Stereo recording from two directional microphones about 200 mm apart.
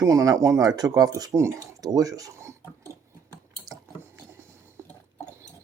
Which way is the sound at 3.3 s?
15° right (ahead or behind).